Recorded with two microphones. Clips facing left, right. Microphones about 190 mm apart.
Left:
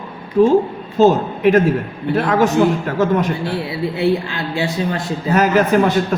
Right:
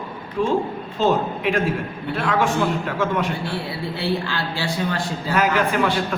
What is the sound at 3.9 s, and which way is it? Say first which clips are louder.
A man's voice: left 6 dB; 20° left (ahead or behind).